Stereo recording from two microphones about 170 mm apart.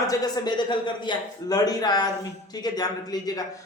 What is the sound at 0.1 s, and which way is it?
Speech, 25° left (ahead or behind).